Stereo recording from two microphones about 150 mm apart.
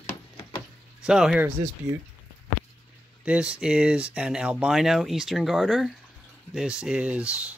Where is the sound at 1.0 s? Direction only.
5° right (ahead or behind).